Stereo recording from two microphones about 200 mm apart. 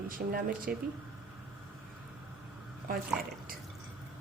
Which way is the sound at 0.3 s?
45° right (ahead or behind).